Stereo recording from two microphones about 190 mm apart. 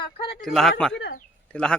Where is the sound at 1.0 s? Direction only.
60° left (ahead or behind).